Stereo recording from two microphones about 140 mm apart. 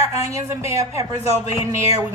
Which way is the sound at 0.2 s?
20° right (ahead or behind).